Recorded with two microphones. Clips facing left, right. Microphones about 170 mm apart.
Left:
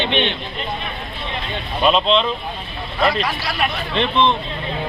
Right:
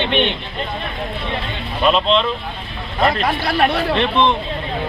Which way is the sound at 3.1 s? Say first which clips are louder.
Right 4 dB; 50° right (ahead or behind).